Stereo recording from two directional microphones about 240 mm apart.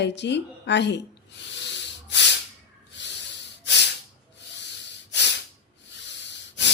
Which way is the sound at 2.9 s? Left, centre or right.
Left.